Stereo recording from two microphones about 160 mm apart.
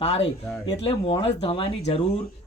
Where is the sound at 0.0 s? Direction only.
40° left (ahead or behind).